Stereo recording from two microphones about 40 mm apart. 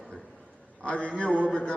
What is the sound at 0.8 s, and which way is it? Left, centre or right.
Speech, left.